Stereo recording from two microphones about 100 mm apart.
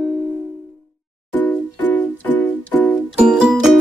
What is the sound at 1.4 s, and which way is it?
Music, 15° left (ahead or behind).